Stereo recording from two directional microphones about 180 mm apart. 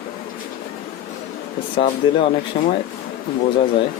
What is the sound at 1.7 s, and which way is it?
Speech, 30° left (ahead or behind).